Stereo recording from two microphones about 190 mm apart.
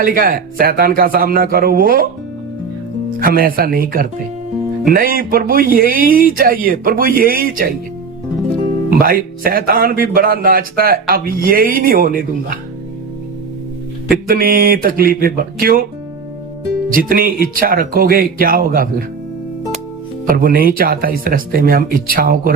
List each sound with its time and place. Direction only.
0.0 s speech: 50° right (ahead or behind)
3.2 s speech: 50° right (ahead or behind)
8.9 s speech: 50° right (ahead or behind)
14.3 s speech: 50° right (ahead or behind)
17.1 s speech: 50° right (ahead or behind)
20.2 s speech: 50° right (ahead or behind)